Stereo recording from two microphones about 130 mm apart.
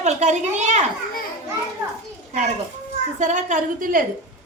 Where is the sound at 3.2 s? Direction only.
70° right (ahead or behind); by 4.1 s 90° right.